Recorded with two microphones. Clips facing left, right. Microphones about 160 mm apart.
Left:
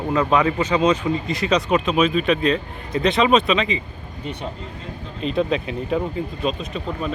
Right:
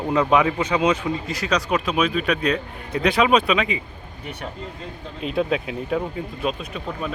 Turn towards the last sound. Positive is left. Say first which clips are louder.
# left 3 dB
turn(degrees=-5)  # may be behind; listen again after turning